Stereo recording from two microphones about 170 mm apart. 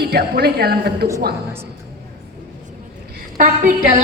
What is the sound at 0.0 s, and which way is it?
A woman's voice, 65° right (ahead or behind).